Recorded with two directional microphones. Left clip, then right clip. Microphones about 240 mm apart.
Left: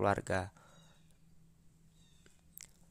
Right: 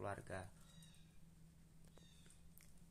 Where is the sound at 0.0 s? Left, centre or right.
Left.